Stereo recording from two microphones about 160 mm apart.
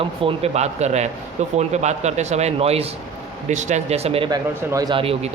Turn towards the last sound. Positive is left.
turn(degrees=-25)  # may be behind; listen again after turning